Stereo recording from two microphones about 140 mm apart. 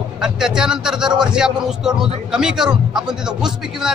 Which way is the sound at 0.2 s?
5° right (ahead or behind).